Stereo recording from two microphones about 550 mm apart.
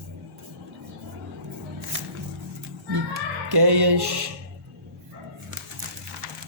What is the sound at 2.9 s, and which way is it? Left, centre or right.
Child singing, right.